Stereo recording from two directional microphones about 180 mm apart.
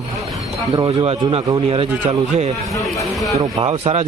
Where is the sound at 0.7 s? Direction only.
30° right (ahead or behind).